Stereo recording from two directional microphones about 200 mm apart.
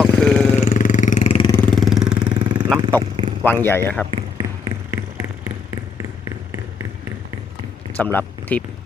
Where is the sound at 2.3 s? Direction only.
20° right (ahead or behind).